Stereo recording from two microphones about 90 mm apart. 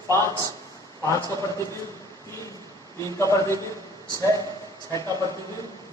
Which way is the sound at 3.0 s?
35° left (ahead or behind).